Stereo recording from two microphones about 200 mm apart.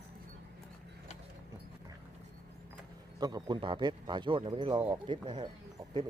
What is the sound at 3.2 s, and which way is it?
Speech, 20° right (ahead or behind).